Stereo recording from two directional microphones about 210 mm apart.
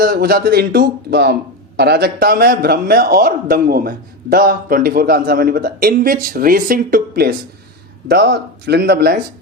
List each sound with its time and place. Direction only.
0.0 s speech: 45° right (ahead or behind)